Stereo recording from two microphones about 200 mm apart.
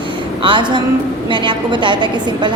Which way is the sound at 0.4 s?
25° right (ahead or behind).